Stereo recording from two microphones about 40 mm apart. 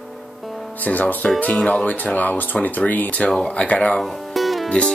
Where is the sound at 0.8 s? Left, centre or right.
Left.